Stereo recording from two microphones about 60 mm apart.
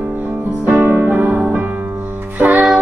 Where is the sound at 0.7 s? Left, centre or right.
Right.